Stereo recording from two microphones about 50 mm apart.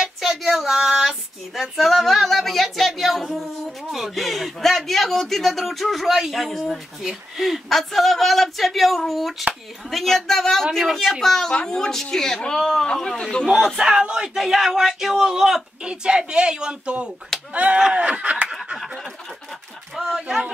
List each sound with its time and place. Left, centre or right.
0.2 s child singing: centre
1.5 s a man's voice: centre
13.7 s a man's voice: centre
15.8 s speech: centre
17.3 s speech: centre
17.9 s a sound: right
20.0 s speech: centre